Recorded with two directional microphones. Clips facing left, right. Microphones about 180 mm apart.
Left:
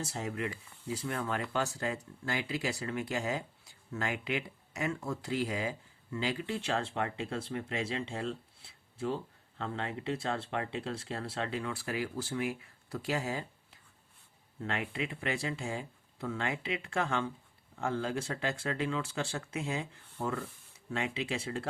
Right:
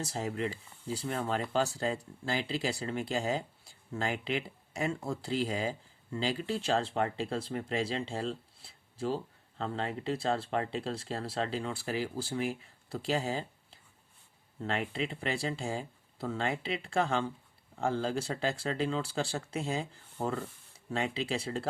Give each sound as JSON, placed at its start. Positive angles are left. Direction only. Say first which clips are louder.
{"t": 0.0, "sound": "speech", "louder": "right 2 dB", "side_deg": -35}